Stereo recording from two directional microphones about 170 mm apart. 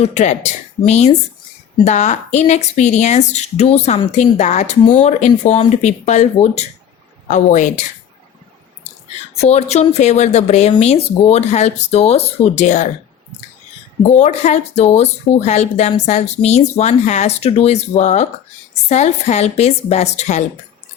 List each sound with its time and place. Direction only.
0.0 s a woman's voice: 40° left (ahead or behind)
9.3 s speech: 40° left (ahead or behind)
14.1 s speech: 40° left (ahead or behind)